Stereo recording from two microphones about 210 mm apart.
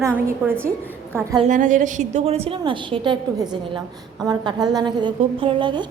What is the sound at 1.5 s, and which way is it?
A woman's voice, 35° right (ahead or behind).